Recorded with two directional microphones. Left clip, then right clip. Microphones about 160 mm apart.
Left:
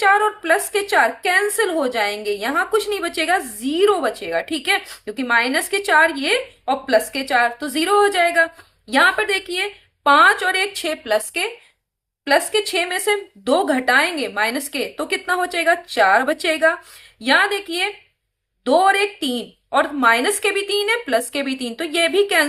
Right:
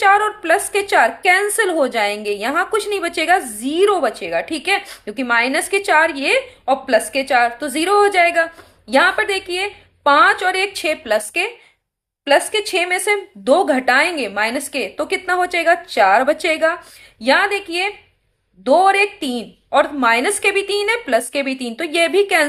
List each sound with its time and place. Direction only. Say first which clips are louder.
0.0 s a woman's voice: right 2 dB; 30° right (ahead or behind)